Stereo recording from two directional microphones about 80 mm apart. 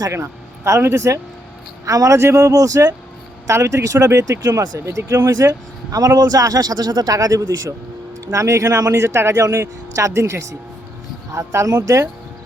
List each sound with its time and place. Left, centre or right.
0.0 s speech: right
5.0 s speech: right
5.4 s speech: right